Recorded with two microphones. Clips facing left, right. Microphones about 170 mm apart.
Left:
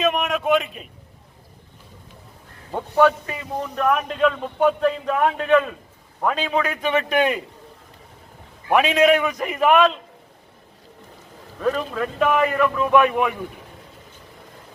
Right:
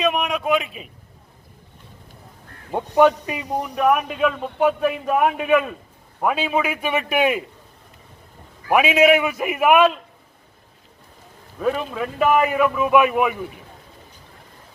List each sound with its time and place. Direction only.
0.0 s a man's voice: centre (ahead or behind)
2.7 s a man's voice: 15° right (ahead or behind)
8.7 s a man's voice: 5° right (ahead or behind)
11.6 s a man's voice: 5° right (ahead or behind)